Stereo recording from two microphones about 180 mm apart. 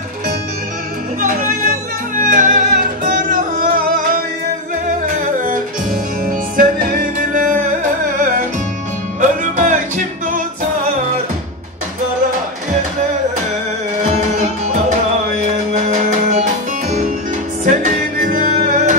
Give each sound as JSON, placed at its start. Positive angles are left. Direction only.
{"t": 1.2, "sound": "music", "side_deg": -45}
{"t": 6.2, "sound": "music", "side_deg": -50}
{"t": 9.2, "sound": "music", "side_deg": -45}
{"t": 15.7, "sound": "music", "side_deg": -40}
{"t": 17.6, "sound": "music", "side_deg": -50}